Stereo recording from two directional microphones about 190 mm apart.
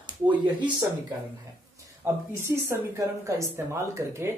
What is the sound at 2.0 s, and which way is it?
Speech, 10° right (ahead or behind).